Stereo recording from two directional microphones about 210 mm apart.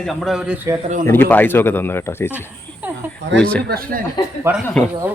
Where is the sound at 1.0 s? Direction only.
10° left (ahead or behind).